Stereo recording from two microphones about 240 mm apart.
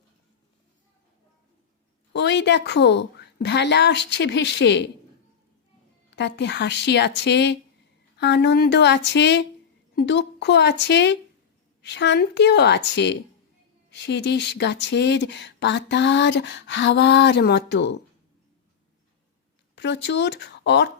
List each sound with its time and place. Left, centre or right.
2.1 s speech: left
6.1 s speech: left
19.7 s speech: left